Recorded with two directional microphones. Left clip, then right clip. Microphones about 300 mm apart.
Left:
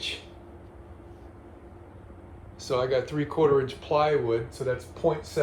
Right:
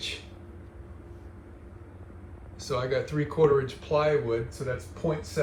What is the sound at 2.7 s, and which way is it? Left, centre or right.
Speech, centre.